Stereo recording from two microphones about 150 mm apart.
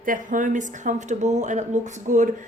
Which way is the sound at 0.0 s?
65° right (ahead or behind).